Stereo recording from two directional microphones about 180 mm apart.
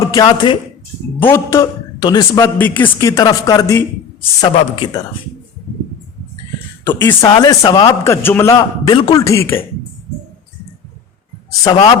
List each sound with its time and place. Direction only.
0.0 s speech: 20° left (ahead or behind)
1.2 s a man's voice: 15° left (ahead or behind)
4.5 s speech: 30° left (ahead or behind)
6.8 s a man's voice: 10° left (ahead or behind)
7.2 s a man's voice: 25° left (ahead or behind)
11.6 s speech: 30° left (ahead or behind)